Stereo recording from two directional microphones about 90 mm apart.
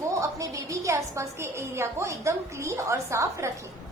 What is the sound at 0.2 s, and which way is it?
A woman's voice, 35° right (ahead or behind).